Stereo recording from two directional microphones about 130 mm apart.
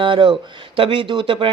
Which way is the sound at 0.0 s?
40° right (ahead or behind).